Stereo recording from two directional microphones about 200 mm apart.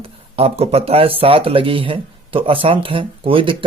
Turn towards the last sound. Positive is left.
turn(degrees=-25)  # may be behind; listen again after turning